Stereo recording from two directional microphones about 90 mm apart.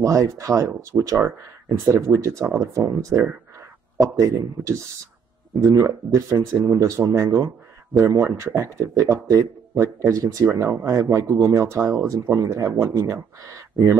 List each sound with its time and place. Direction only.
0.0 s speech: 35° right (ahead or behind)